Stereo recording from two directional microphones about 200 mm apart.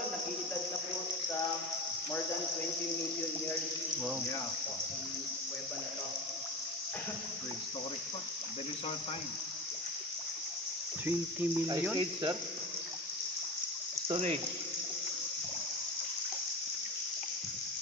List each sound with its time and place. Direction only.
11.1 s speech: 15° right (ahead or behind)
14.0 s speech: 30° right (ahead or behind)